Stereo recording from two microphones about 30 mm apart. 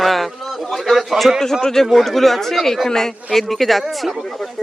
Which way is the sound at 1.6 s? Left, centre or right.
Centre.